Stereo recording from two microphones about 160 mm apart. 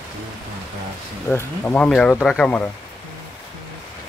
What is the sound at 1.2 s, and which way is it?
Speech, 10° left (ahead or behind).